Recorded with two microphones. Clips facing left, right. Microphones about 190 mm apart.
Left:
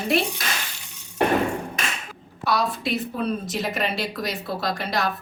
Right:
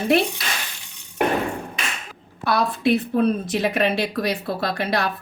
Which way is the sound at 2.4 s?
55° right (ahead or behind).